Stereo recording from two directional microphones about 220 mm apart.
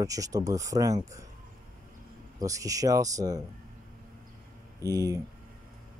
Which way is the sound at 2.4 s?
15° right (ahead or behind).